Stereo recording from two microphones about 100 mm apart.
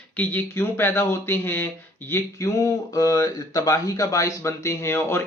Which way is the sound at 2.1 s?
30° left (ahead or behind).